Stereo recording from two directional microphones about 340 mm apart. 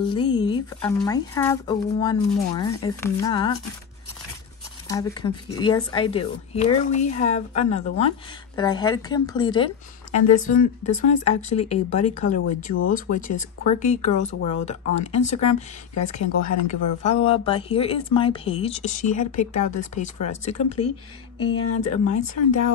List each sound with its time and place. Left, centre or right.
0.0 s a sound: centre
0.9 s speech: centre
4.8 s speech: centre
10.2 s speech: left
11.1 s speech: centre
15.9 s speech: left
16.6 s speech: centre
21.9 s speech: left